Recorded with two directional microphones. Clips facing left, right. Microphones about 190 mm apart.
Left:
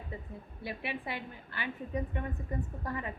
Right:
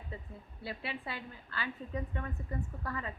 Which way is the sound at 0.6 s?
15° left (ahead or behind).